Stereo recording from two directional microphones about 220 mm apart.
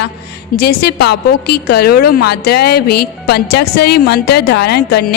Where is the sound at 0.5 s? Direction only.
45° left (ahead or behind).